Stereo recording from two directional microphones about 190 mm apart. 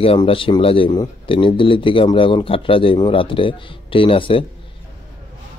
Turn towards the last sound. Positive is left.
turn(degrees=30)  # may be behind; listen again after turning